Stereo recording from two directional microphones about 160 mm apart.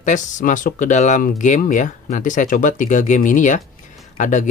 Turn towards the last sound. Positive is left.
turn(degrees=55)  # may be behind; listen again after turning